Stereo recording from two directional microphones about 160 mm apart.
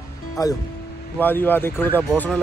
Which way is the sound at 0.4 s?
20° left (ahead or behind).